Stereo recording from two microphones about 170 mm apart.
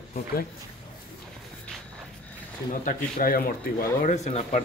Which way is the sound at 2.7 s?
55° left (ahead or behind).